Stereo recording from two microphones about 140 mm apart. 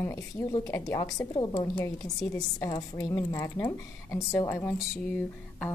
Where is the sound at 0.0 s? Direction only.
20° left (ahead or behind).